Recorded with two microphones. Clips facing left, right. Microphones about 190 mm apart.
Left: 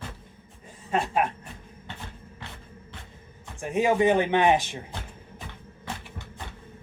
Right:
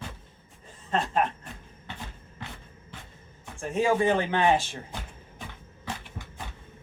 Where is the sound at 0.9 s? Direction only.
10° left (ahead or behind).